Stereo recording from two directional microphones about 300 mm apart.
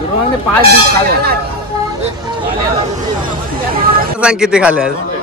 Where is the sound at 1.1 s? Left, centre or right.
Right.